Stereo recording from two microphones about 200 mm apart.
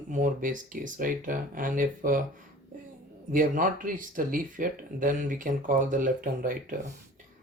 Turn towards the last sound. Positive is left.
turn(degrees=-45)  # may be behind; listen again after turning